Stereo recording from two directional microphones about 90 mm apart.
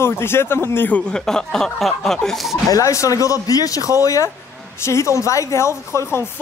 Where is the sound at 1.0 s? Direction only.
5° left (ahead or behind).